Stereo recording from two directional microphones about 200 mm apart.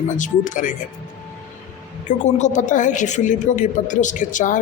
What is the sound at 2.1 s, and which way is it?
A woman's voice, 35° left (ahead or behind).